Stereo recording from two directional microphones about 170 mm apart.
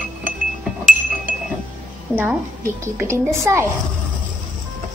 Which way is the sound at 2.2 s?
15° right (ahead or behind).